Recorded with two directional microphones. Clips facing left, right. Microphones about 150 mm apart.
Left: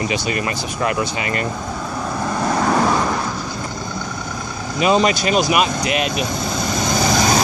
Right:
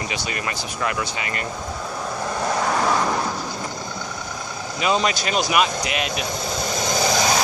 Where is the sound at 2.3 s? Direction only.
60° left (ahead or behind).